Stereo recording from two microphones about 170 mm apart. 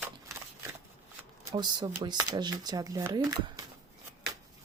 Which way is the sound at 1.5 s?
25° right (ahead or behind).